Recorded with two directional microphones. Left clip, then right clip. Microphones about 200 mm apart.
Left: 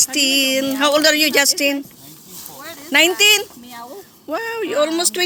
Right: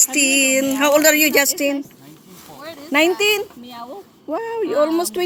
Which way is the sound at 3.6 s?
70° right (ahead or behind).